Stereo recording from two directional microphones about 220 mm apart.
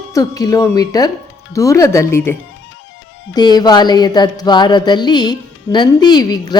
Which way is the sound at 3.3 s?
20° left (ahead or behind).